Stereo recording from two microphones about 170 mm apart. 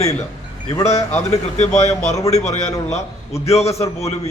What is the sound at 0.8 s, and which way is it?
A man's voice, 40° left (ahead or behind).